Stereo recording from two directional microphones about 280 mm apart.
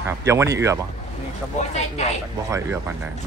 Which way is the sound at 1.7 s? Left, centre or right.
Left.